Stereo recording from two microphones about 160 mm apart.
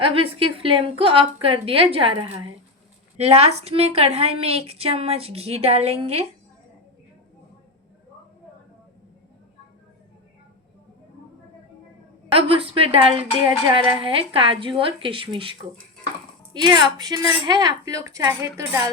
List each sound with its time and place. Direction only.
0.0 s a woman's voice: 35° right (ahead or behind)
12.3 s a woman's voice: 35° right (ahead or behind)
16.6 s speech: 30° right (ahead or behind)